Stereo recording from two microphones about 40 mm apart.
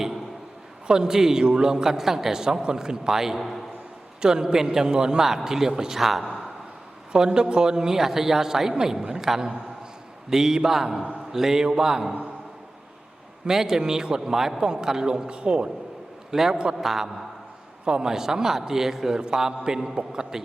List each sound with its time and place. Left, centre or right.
0.9 s a man's voice: centre
4.2 s a man's voice: centre
6.0 s a man's voice: centre
7.1 s a man's voice: centre
13.4 s a man's voice: centre
16.3 s a man's voice: centre
17.8 s a man's voice: centre